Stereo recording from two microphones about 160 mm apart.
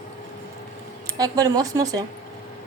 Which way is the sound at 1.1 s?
25° right (ahead or behind).